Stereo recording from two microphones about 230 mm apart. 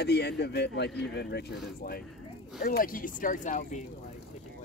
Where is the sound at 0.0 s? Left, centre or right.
Left.